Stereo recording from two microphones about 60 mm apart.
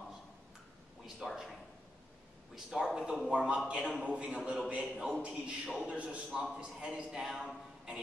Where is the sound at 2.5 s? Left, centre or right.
Centre.